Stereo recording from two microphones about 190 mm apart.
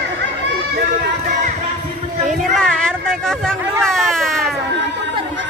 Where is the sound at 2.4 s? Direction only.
5° left (ahead or behind).